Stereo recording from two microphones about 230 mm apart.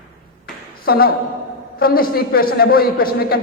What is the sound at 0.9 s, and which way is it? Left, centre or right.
A man's voice, left.